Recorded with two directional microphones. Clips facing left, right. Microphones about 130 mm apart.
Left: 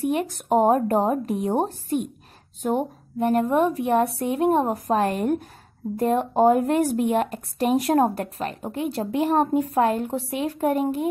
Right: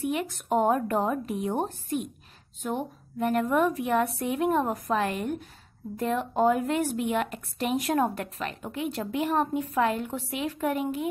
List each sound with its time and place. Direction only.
0.0 s a woman's voice: 40° left (ahead or behind)
3.2 s a woman's voice: 30° left (ahead or behind)